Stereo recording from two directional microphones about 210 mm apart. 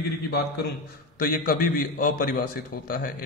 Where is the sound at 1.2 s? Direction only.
40° left (ahead or behind).